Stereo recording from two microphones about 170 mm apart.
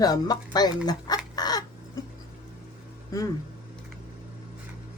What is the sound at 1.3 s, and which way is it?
Crow, 25° left (ahead or behind).